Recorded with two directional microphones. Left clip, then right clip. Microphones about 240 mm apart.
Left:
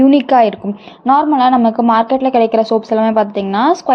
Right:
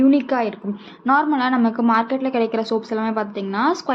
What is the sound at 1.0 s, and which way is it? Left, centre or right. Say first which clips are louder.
A woman's voice: left 7 dB; left.